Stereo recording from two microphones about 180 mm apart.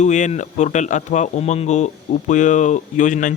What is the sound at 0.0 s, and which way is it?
A man's voice, 40° left (ahead or behind).